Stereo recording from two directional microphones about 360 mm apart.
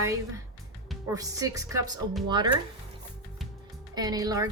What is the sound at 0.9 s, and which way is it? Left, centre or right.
Speech, centre.